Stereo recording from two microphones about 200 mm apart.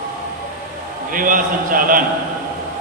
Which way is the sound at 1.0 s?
45° right (ahead or behind).